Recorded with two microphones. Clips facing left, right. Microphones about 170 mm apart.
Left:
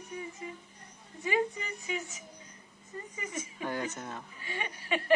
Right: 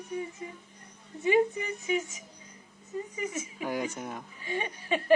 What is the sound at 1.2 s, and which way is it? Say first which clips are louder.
Speech: right 6 dB; 20° right (ahead or behind).